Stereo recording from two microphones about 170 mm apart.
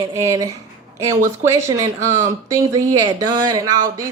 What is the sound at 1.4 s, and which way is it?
Speech, 15° right (ahead or behind).